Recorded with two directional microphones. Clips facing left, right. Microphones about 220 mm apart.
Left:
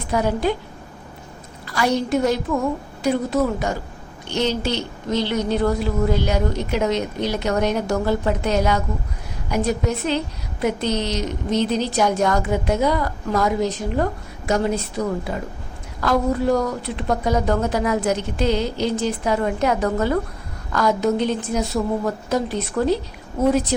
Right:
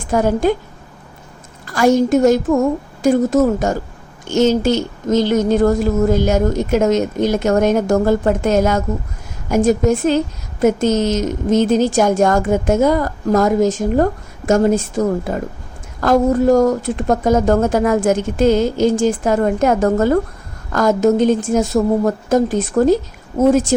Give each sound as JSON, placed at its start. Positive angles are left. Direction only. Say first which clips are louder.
{"t": 0.0, "sound": "a woman's voice", "louder": "right 5 dB", "side_deg": -45}
{"t": 1.6, "sound": "a woman's voice", "louder": "right 8 dB", "side_deg": -45}